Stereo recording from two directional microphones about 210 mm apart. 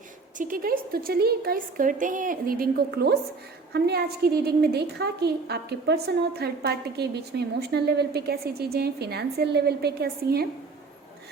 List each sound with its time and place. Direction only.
0.3 s a woman's voice: 40° right (ahead or behind)